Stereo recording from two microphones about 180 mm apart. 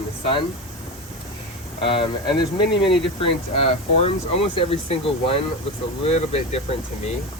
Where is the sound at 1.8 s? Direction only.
30° left (ahead or behind).